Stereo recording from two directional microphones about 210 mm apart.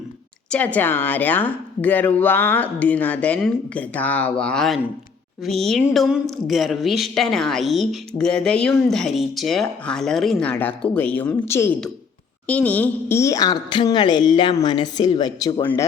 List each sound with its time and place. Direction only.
0.5 s a woman's voice: 5° left (ahead or behind)